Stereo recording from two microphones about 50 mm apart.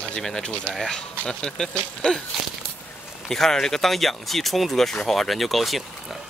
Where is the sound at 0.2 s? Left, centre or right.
Centre.